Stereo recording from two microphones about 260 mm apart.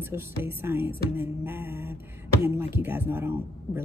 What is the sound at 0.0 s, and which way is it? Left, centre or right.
Speech, centre.